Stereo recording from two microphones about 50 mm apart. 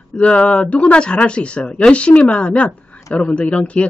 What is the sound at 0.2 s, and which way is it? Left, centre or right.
Speech, left.